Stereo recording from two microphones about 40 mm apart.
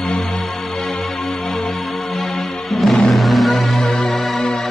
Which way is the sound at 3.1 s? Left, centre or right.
Centre.